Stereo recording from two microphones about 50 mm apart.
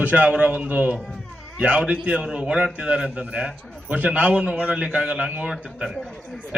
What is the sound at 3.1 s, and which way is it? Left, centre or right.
A man's voice, right.